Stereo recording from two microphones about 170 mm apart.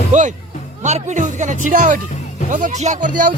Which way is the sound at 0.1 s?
45° right (ahead or behind).